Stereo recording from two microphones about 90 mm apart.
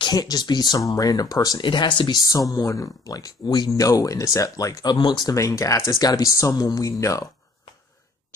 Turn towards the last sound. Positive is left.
turn(degrees=40)  # may be behind; listen again after turning